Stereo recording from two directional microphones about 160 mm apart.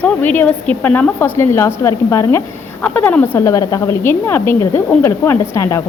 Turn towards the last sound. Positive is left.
turn(degrees=20)  # may be behind; listen again after turning